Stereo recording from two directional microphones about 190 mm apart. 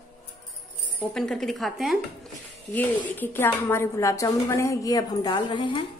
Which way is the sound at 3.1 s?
10° left (ahead or behind).